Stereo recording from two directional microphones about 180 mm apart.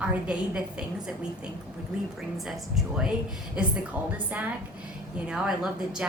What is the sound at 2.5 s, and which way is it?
A woman's voice, centre (ahead or behind).